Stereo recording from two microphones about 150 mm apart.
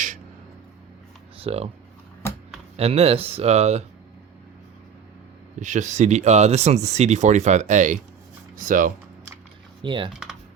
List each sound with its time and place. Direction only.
1.4 s speech: 40° right (ahead or behind)
2.7 s speech: 40° right (ahead or behind)
5.5 s speech: 55° right (ahead or behind)
9.8 s speech: 30° right (ahead or behind)